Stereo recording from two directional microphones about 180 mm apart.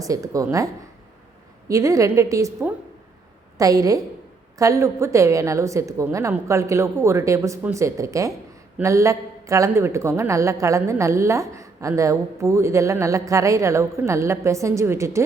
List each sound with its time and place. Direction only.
0.0 s a woman's voice: 20° right (ahead or behind)